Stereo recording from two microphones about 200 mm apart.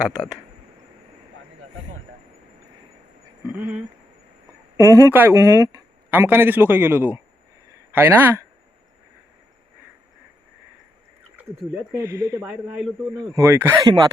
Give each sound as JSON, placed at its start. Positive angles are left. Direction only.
{"t": 3.6, "sound": "speech", "side_deg": -10}
{"t": 11.9, "sound": "speech", "side_deg": -15}